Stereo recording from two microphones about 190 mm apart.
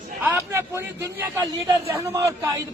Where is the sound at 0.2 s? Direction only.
10° right (ahead or behind).